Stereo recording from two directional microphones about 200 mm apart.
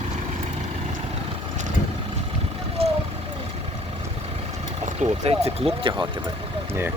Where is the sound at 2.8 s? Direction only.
30° right (ahead or behind).